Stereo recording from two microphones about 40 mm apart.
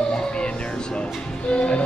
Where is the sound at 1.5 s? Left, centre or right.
Left.